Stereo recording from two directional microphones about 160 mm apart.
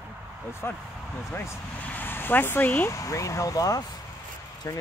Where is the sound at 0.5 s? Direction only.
15° left (ahead or behind).